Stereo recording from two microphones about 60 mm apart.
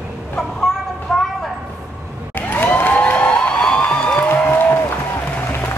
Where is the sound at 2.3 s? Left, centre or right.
Left; by 4.0 s centre.